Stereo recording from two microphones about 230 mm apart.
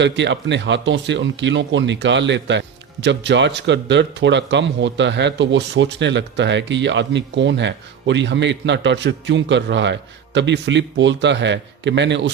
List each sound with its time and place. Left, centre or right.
0.0 s speech: right